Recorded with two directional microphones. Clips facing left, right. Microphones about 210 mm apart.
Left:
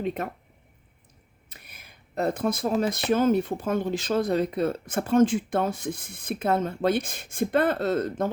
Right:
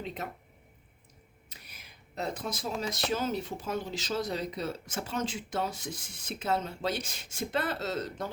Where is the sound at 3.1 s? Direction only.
55° left (ahead or behind).